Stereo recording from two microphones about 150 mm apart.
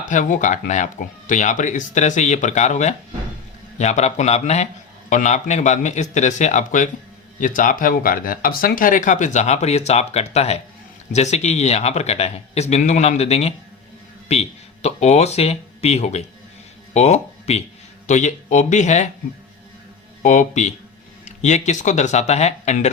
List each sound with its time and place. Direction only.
0.0 s a man's voice: 60° left (ahead or behind)
20.2 s a man's voice: 55° left (ahead or behind)